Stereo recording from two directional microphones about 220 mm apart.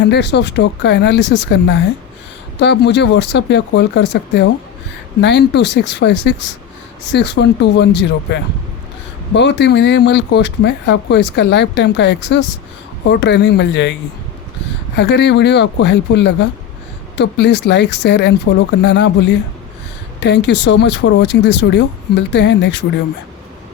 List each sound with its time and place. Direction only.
0.0 s speech: 55° left (ahead or behind)
14.9 s speech: 50° left (ahead or behind)
20.1 s speech: 50° left (ahead or behind)